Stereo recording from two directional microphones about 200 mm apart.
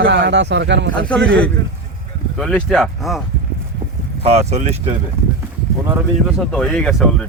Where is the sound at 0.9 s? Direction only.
5° left (ahead or behind).